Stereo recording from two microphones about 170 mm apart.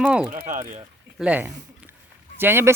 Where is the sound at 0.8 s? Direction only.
10° right (ahead or behind).